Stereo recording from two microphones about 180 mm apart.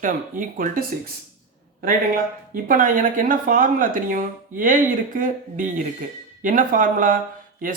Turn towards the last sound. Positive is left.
turn(degrees=-50)  # may be behind; listen again after turning